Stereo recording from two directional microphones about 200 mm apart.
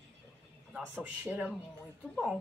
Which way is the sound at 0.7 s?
10° right (ahead or behind).